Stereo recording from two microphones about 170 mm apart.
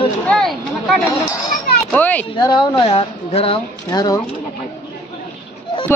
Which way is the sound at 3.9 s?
20° left (ahead or behind).